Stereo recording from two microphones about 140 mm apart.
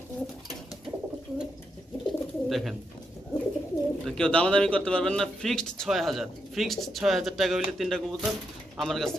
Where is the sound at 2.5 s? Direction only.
Centre (ahead or behind).